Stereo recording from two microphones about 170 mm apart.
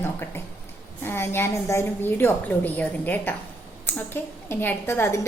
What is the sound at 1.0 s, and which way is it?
A woman's voice, 15° left (ahead or behind).